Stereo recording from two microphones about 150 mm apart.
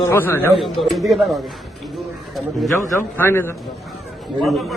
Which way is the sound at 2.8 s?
15° left (ahead or behind).